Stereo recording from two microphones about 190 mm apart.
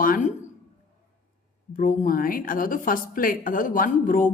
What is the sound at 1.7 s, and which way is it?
Speech, 45° left (ahead or behind).